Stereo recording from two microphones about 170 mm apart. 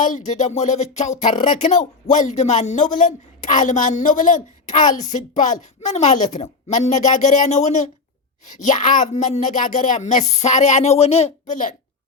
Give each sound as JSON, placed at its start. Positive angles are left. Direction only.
{"t": 0.0, "sound": "speech", "side_deg": 45}